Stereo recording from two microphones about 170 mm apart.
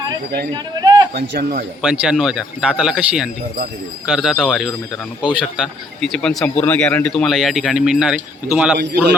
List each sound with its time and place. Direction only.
0.5 s a sound: 25° right (ahead or behind)
1.1 s a man's voice: 55° right (ahead or behind)
1.8 s speech: 5° right (ahead or behind)